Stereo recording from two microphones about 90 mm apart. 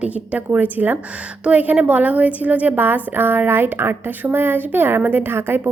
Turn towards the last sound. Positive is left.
turn(degrees=-25)  # may be behind; listen again after turning